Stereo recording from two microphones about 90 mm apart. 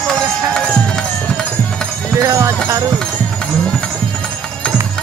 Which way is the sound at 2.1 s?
30° right (ahead or behind).